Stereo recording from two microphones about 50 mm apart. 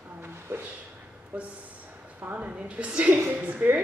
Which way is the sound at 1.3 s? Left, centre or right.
Right.